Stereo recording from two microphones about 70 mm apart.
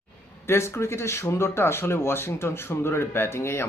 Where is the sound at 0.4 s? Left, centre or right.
Left.